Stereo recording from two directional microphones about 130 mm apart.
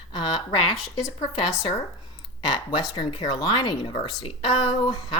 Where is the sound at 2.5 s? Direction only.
30° left (ahead or behind).